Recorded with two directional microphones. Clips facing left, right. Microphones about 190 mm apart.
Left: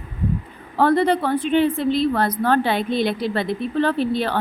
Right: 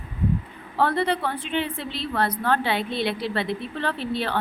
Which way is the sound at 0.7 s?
45° left (ahead or behind).